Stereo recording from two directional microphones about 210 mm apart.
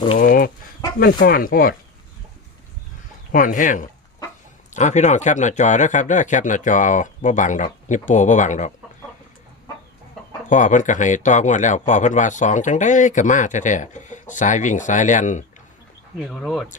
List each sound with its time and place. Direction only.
0.2 s speech: 40° left (ahead or behind)
3.3 s speech: 40° left (ahead or behind)
10.5 s speech: 35° left (ahead or behind)
16.1 s speech: centre (ahead or behind)